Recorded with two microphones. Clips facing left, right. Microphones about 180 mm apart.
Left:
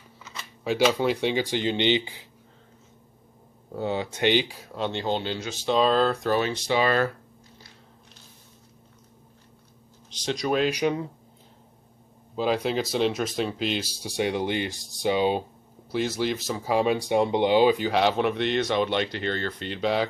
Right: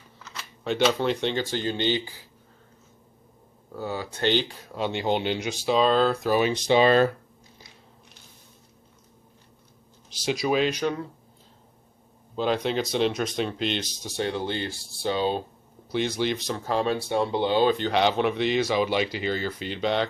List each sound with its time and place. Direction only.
0.2 s speech: centre (ahead or behind); by 2.2 s 20° left (ahead or behind)
3.7 s speech: 25° left (ahead or behind); by 5.8 s 10° right (ahead or behind)
5.8 s speech: centre (ahead or behind)
6.3 s speech: 15° right (ahead or behind)
10.0 s speech: 10° right (ahead or behind)
10.7 s speech: 15° left (ahead or behind)
12.4 s speech: 5° left (ahead or behind)
15.9 s speech: centre (ahead or behind)